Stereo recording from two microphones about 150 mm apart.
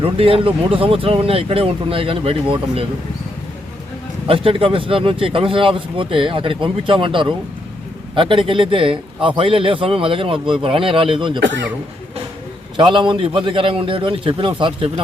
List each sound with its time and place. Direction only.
0.0 s a man's voice: 40° right (ahead or behind)
4.3 s a man's voice: 35° right (ahead or behind)
12.7 s a man's voice: 35° right (ahead or behind)